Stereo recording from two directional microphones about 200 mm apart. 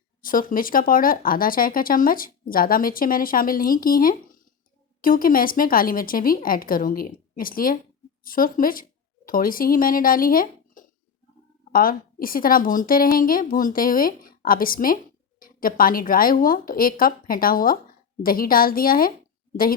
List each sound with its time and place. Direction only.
0.2 s speech: 45° left (ahead or behind)